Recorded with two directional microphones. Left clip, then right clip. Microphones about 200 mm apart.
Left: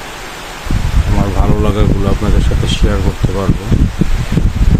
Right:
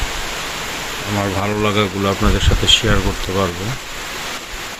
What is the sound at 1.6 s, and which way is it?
Speech, 15° left (ahead or behind).